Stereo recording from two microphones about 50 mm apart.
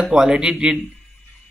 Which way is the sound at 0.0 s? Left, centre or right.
Centre.